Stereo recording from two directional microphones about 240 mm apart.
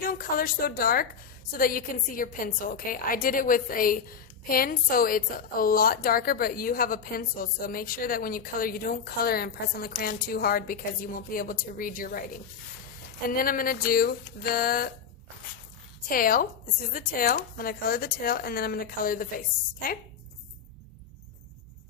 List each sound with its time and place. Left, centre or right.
0.0 s a woman's voice: left
13.2 s a woman's voice: left
16.0 s a woman's voice: left